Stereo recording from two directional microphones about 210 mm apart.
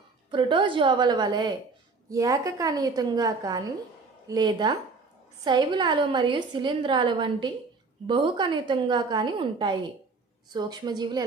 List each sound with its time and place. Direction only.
0.3 s a woman's voice: 20° right (ahead or behind)